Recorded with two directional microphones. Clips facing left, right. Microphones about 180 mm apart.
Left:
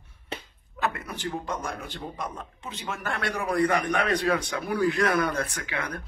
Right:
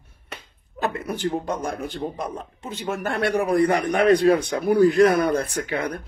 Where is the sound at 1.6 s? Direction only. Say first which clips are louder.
Right 7 dB; 30° right (ahead or behind).